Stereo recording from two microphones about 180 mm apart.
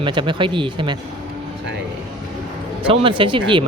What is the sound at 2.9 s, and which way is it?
Speech, 30° right (ahead or behind).